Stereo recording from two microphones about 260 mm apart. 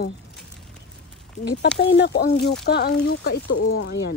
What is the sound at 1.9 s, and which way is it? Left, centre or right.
Speech, left.